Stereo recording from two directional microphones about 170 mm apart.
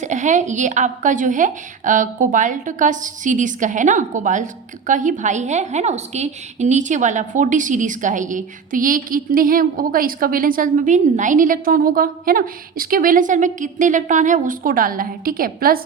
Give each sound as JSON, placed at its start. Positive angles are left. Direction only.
{"t": 0.0, "sound": "a woman's voice", "side_deg": -45}